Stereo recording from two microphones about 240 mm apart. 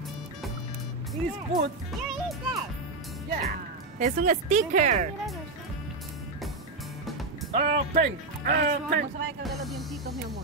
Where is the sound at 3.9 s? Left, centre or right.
Right.